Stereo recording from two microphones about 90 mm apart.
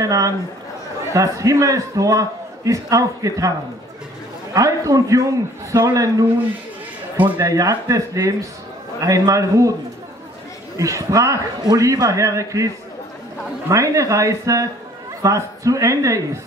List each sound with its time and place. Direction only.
0.0 s a man's voice: 40° right (ahead or behind)
4.6 s a man's voice: 40° right (ahead or behind)
7.3 s a man's voice: 40° right (ahead or behind)
10.8 s a man's voice: 35° right (ahead or behind)